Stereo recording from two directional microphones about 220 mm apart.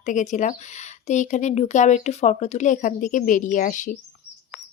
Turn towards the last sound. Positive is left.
turn(degrees=35)  # may be behind; listen again after turning